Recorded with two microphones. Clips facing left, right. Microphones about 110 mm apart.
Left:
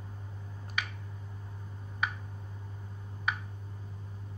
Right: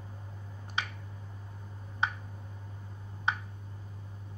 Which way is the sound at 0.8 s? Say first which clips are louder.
Right 1 dB; 25° right (ahead or behind).